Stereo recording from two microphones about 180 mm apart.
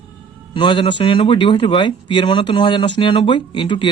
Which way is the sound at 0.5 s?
25° left (ahead or behind).